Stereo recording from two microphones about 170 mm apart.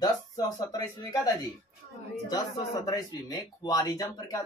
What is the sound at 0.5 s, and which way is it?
Speech, 20° left (ahead or behind).